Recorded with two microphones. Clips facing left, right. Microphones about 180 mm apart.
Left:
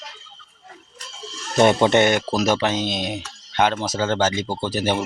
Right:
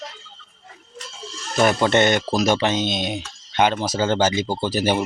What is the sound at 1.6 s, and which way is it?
Speech, 20° left (ahead or behind).